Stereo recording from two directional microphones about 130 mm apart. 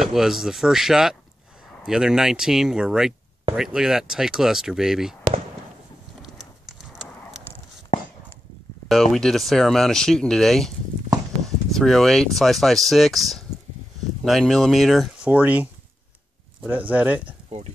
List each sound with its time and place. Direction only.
0.0 s speech: 5° right (ahead or behind)
6.2 s horse: centre (ahead or behind)
8.8 s speech: centre (ahead or behind)
14.2 s speech: centre (ahead or behind)
15.2 s speech: 10° right (ahead or behind)